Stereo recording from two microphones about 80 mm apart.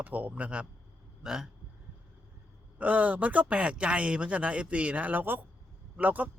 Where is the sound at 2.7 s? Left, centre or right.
Centre.